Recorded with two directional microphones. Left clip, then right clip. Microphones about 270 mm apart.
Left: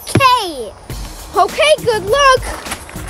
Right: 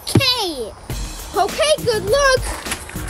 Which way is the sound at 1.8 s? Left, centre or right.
Left.